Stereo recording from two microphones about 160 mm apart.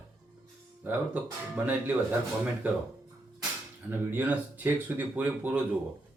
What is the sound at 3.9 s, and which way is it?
Speech, 10° right (ahead or behind).